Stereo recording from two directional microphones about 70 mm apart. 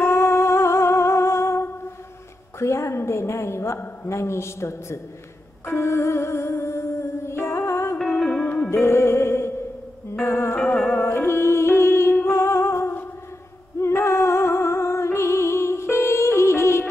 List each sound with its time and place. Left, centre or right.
0.0 s music: left
2.6 s a woman's voice: left
5.7 s music: left
8.1 s music: centre
8.6 s music: left